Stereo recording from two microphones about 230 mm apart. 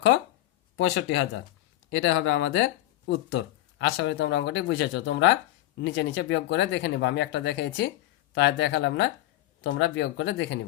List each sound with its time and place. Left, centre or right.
0.8 s speech: left